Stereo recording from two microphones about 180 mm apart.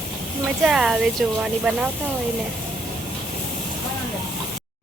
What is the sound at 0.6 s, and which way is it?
Speech, centre (ahead or behind).